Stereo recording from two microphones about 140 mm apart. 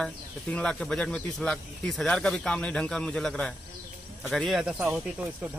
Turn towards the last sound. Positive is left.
turn(degrees=-10)  # may be behind; listen again after turning